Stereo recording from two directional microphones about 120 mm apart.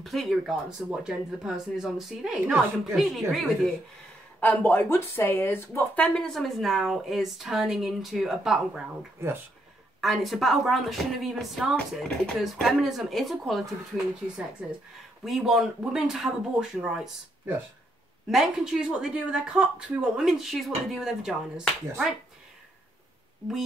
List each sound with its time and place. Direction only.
0.0 s a woman's voice: centre (ahead or behind)
4.4 s speech: 15° left (ahead or behind)
6.1 s a woman's voice: centre (ahead or behind)
9.9 s a woman's voice: centre (ahead or behind)
15.2 s a woman's voice: centre (ahead or behind)
18.3 s a woman's voice: 5° right (ahead or behind)